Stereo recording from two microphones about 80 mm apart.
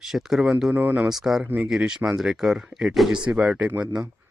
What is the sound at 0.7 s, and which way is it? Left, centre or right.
Speech, centre.